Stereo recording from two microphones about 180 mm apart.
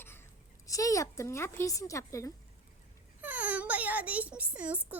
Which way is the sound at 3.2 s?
10° right (ahead or behind).